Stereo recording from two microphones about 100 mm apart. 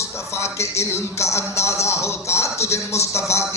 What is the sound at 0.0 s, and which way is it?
A man's voice, 30° left (ahead or behind).